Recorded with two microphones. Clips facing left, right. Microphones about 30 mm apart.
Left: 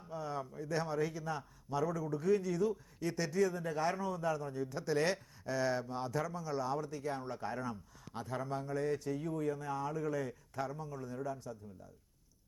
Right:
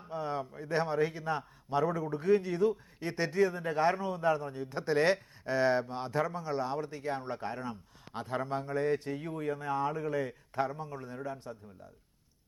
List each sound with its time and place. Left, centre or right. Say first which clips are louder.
0.0 s a man's voice: right 5 dB; right